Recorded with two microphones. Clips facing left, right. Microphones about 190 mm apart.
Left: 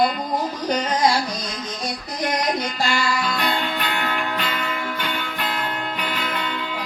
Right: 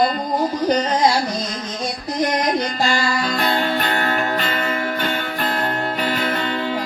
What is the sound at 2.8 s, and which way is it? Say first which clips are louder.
Music: even; 40° right (ahead or behind).